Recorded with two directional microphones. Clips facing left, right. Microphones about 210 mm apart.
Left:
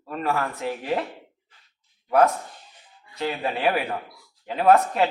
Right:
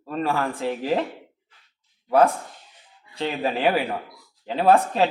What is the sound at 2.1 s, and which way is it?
A man's voice, 30° right (ahead or behind).